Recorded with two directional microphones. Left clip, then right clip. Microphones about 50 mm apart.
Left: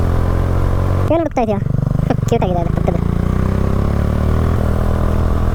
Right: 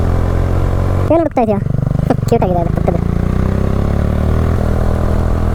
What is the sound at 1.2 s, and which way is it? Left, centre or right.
Speech, centre.